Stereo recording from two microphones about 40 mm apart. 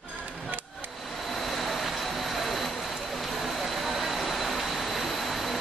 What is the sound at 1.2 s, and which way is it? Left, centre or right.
Vehicle, centre.